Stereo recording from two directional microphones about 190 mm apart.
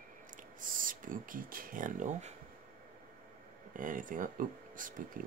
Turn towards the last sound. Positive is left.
turn(degrees=-45)  # may be behind; listen again after turning